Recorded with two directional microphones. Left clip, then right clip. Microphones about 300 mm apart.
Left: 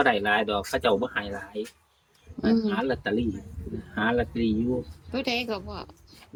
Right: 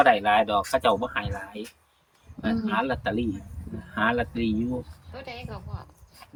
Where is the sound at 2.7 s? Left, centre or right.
Centre.